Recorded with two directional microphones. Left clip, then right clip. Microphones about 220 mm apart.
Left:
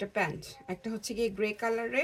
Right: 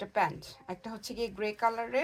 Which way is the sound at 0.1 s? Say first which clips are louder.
Right 2 dB; 25° right (ahead or behind).